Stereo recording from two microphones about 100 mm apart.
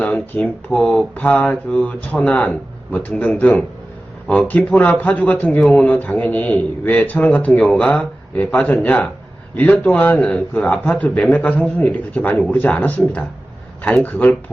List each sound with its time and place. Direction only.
0.0 s speech: 10° left (ahead or behind)
14.0 s speech: 15° left (ahead or behind)